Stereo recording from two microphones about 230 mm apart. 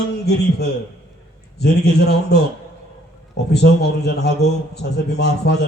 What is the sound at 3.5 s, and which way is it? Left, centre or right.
Speech, left.